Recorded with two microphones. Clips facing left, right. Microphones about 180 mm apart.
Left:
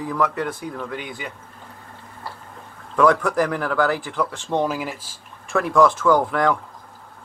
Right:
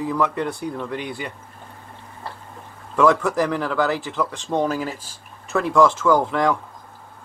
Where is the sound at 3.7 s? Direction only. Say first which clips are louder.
Left 1 dB; 20° right (ahead or behind).